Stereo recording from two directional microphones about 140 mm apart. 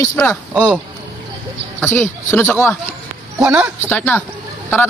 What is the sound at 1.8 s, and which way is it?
A man's voice, 15° left (ahead or behind).